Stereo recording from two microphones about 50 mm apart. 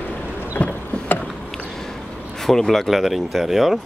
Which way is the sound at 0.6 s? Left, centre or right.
Left.